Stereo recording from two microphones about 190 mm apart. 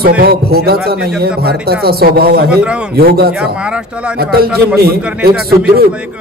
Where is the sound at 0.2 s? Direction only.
55° right (ahead or behind).